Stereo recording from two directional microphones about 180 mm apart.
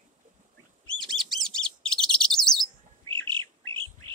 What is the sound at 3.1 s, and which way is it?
Bird, 25° right (ahead or behind).